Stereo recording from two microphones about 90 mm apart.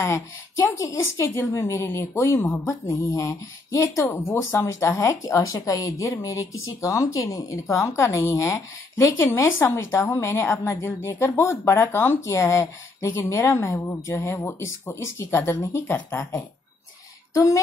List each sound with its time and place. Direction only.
0.0 s speech: 35° left (ahead or behind)